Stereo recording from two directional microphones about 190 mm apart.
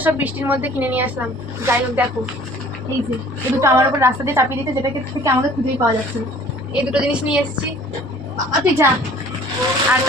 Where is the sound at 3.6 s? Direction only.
15° right (ahead or behind).